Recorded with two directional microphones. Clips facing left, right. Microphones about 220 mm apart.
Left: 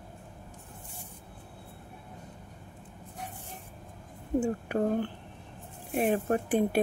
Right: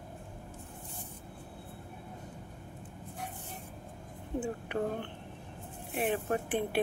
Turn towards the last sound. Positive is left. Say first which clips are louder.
# left 5 dB
turn(degrees=40)  # may be behind; listen again after turning